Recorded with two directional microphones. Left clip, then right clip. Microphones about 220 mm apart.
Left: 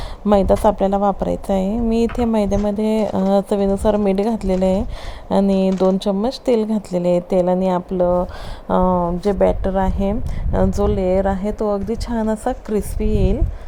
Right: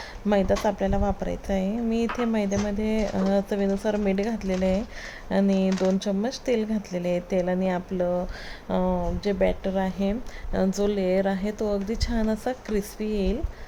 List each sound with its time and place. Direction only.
0.3 s speech: 25° left (ahead or behind)